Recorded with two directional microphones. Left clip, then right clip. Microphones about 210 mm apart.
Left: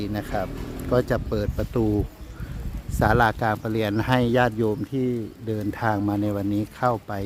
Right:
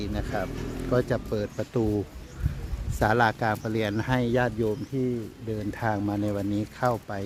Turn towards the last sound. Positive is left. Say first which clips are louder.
# left 3 dB
turn(degrees=20)  # may be behind; listen again after turning